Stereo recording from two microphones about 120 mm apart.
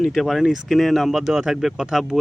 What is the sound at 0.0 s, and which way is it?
Speech, centre (ahead or behind).